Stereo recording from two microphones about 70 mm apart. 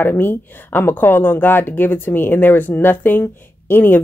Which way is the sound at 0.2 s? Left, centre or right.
Left.